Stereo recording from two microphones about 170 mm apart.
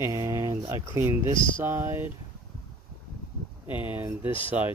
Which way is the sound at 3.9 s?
10° right (ahead or behind).